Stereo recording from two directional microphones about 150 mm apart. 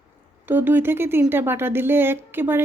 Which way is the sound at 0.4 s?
10° right (ahead or behind).